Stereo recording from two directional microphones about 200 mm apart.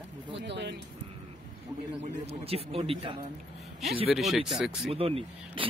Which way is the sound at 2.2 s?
30° right (ahead or behind).